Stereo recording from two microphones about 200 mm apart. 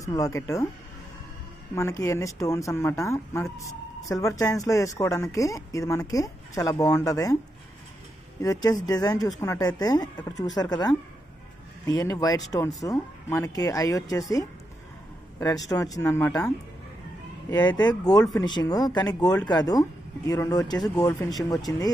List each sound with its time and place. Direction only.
0.0 s speech: 15° left (ahead or behind)
1.8 s speech: 15° left (ahead or behind)
8.4 s speech: 15° left (ahead or behind)